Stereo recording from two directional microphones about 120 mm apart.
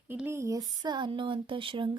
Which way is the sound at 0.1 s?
20° right (ahead or behind).